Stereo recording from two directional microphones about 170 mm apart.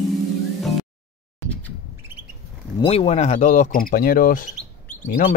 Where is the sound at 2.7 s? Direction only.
35° left (ahead or behind).